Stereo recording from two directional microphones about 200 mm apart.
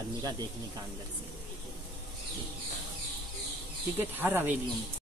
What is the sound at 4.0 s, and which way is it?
Speech, 10° right (ahead or behind).